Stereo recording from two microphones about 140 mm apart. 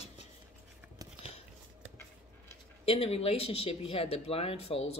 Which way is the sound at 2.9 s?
45° left (ahead or behind).